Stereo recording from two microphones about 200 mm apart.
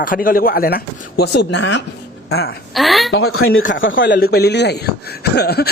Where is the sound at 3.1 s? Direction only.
90° left.